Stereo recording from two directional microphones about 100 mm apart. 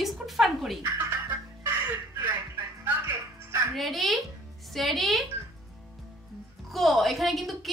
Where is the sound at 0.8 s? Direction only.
25° right (ahead or behind).